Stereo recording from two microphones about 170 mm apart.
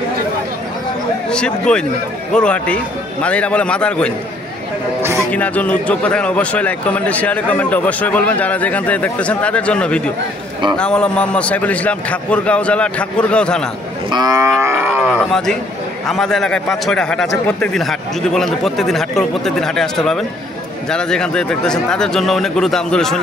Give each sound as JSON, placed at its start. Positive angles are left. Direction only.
{"t": 1.3, "sound": "a man's voice", "side_deg": 5}
{"t": 5.3, "sound": "a man's voice", "side_deg": 10}
{"t": 14.1, "sound": "livestock", "side_deg": -20}
{"t": 16.1, "sound": "speech", "side_deg": 0}